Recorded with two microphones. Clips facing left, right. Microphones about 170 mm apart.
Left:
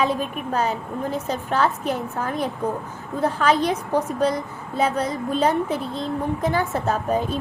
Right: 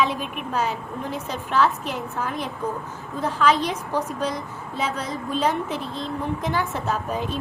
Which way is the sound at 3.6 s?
50° left (ahead or behind).